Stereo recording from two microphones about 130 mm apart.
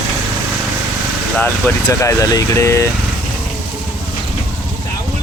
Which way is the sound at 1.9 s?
25° left (ahead or behind).